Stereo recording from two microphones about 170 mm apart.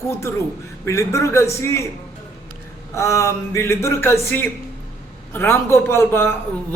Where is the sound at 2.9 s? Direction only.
20° left (ahead or behind).